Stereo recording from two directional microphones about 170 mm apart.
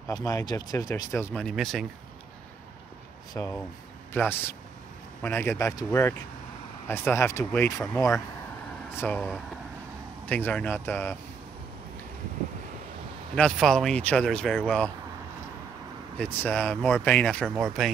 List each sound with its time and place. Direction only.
0.1 s speech: 20° left (ahead or behind); by 1.9 s centre (ahead or behind)
3.4 s speech: 15° left (ahead or behind)
8.9 s speech: 10° left (ahead or behind)
13.3 s speech: 5° left (ahead or behind)
16.2 s speech: 10° left (ahead or behind)